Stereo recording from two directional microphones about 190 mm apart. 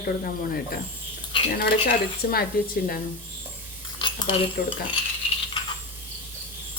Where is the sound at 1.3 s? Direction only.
25° left (ahead or behind).